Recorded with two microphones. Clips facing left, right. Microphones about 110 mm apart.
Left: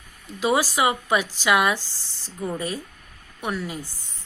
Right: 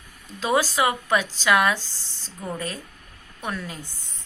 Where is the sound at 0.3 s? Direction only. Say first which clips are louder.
Left 1 dB; 15° left (ahead or behind).